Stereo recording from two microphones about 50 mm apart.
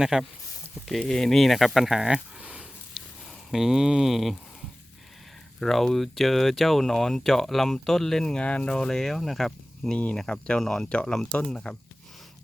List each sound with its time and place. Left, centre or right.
0.0 s speech: centre
0.9 s speech: centre
2.4 s a sound: right
3.5 s speech: centre
5.5 s speech: centre; by 8.7 s left
8.7 s speech: centre
10.2 s speech: centre
10.8 s speech: centre